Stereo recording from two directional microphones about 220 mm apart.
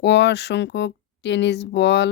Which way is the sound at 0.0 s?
50° left (ahead or behind).